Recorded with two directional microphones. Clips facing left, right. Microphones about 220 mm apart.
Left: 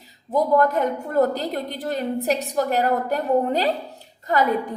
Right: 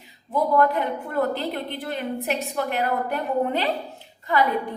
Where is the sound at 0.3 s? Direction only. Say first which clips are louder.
Left 2 dB; 40° left (ahead or behind).